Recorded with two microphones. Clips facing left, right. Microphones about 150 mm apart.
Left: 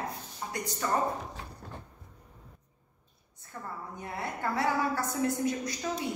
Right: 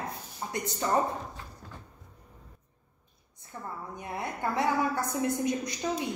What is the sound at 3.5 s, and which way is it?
A woman's voice, 20° right (ahead or behind).